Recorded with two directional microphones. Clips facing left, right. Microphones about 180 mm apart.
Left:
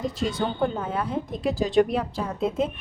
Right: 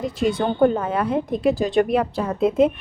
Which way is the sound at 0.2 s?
55° right (ahead or behind).